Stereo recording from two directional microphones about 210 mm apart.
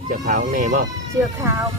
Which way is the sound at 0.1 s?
40° right (ahead or behind).